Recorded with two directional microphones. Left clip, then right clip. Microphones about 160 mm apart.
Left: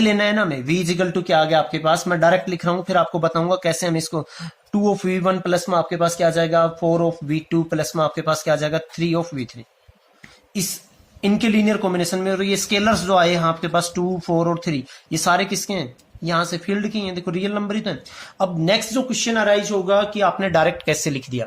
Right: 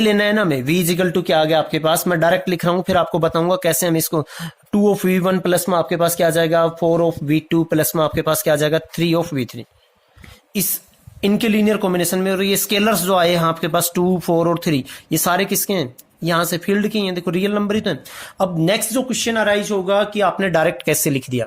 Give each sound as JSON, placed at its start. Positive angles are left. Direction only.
{"t": 0.0, "sound": "speech", "side_deg": -60}
{"t": 11.2, "sound": "a man's voice", "side_deg": -55}